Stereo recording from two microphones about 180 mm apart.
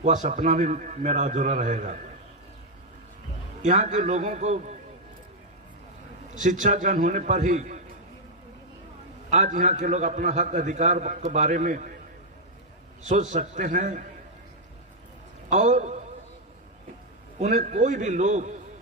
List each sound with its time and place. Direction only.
0.0 s a man's voice: 40° right (ahead or behind)
3.6 s a man's voice: 40° right (ahead or behind)
6.3 s a man's voice: 45° right (ahead or behind)
9.3 s a man's voice: 40° right (ahead or behind)
13.1 s a man's voice: 40° right (ahead or behind)
15.4 s a man's voice: 40° right (ahead or behind)
17.4 s a man's voice: 40° right (ahead or behind)